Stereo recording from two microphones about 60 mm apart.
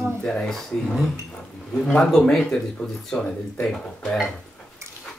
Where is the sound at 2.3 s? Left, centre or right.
Centre.